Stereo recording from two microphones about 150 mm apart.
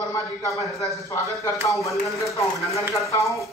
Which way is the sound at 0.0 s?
20° left (ahead or behind).